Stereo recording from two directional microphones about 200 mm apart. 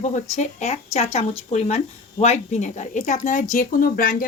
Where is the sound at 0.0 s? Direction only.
35° left (ahead or behind).